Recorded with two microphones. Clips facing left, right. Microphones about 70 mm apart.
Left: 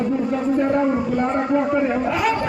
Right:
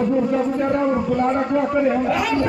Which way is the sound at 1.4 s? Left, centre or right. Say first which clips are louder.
Even; centre.